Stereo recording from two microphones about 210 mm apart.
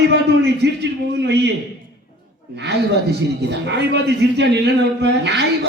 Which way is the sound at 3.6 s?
55° right (ahead or behind).